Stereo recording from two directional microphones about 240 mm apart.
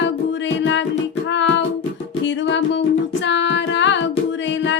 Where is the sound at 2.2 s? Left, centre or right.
Left.